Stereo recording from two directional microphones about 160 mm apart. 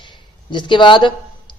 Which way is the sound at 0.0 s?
30° left (ahead or behind).